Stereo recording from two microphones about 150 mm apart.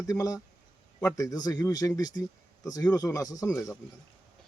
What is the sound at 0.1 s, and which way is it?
Speech, 20° left (ahead or behind).